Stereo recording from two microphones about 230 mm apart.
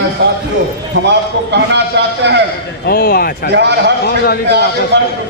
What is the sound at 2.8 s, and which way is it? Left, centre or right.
Speech, left.